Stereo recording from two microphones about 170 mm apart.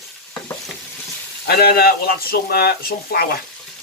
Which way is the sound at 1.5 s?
65° left (ahead or behind).